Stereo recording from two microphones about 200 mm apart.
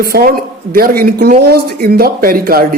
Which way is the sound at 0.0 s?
50° right (ahead or behind).